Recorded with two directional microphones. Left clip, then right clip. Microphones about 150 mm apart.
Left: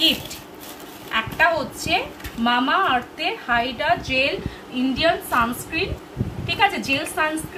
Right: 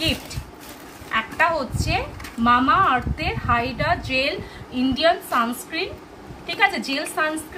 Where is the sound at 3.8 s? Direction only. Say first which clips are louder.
Left 2 dB; 5° right (ahead or behind).